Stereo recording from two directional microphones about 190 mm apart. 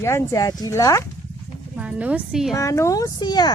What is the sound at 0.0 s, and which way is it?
Speech, 15° left (ahead or behind).